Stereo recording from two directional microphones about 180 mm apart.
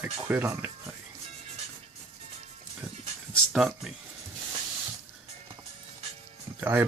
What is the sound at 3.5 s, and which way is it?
Speech, centre (ahead or behind).